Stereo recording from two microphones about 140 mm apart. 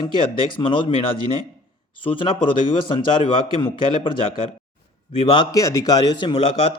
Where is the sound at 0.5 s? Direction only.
35° left (ahead or behind).